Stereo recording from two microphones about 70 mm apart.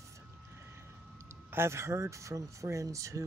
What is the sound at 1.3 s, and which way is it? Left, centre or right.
Speech, right.